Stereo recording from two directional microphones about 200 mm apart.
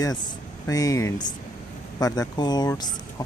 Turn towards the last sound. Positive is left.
turn(degrees=20)  # may be behind; listen again after turning